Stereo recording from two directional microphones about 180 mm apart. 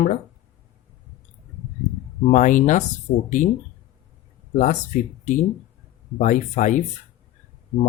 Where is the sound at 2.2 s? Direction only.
45° left (ahead or behind).